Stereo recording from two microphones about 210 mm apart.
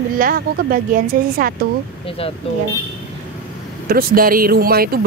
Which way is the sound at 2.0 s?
25° left (ahead or behind).